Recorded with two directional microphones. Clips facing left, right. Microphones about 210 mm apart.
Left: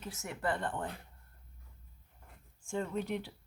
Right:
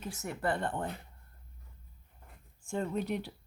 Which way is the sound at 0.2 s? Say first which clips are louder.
Right 2 dB; 40° right (ahead or behind).